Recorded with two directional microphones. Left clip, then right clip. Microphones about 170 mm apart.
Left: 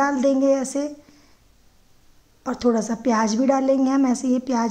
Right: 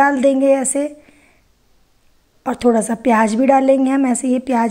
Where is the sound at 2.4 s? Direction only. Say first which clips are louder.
Right 6 dB; 20° right (ahead or behind).